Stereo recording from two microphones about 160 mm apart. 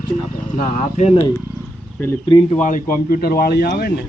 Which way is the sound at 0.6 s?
50° left (ahead or behind).